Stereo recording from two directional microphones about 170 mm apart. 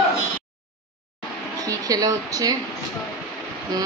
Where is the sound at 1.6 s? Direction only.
20° right (ahead or behind).